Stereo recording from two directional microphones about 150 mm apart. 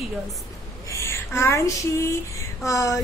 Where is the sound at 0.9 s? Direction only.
20° left (ahead or behind).